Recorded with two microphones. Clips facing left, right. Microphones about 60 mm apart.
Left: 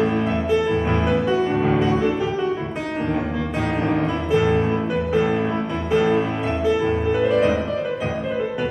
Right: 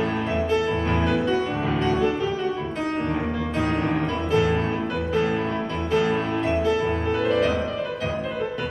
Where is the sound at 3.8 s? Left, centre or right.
Centre.